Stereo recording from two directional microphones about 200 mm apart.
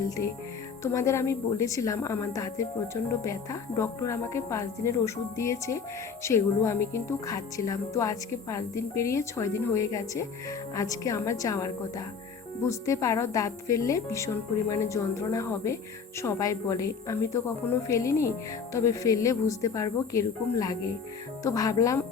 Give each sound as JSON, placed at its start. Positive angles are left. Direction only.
{"t": 0.2, "sound": "a woman's voice", "side_deg": 15}